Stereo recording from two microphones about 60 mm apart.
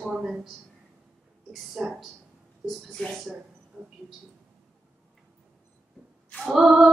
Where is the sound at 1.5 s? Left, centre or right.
Centre.